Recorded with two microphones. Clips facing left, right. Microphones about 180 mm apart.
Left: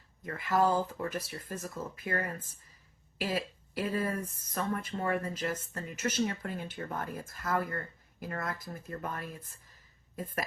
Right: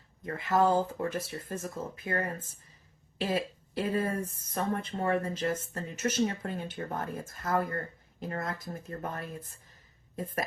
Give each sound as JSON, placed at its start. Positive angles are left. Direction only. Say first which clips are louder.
{"t": 0.3, "sound": "speech", "louder": "right 2 dB", "side_deg": -25}